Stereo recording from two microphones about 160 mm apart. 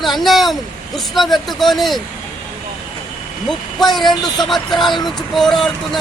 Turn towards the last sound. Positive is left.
turn(degrees=0)  # may be behind; listen again after turning